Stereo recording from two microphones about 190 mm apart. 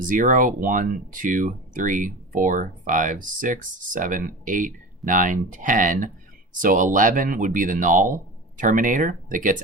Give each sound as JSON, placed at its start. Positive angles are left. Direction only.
{"t": 0.1, "sound": "speech", "side_deg": -45}